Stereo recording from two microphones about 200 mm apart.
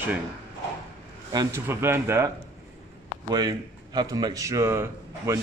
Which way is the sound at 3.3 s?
20° right (ahead or behind).